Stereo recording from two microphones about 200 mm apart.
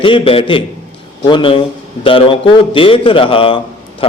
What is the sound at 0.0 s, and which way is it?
A man's voice, 25° left (ahead or behind).